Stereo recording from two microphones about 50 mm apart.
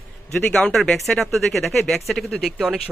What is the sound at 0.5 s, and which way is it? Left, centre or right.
Speech, centre.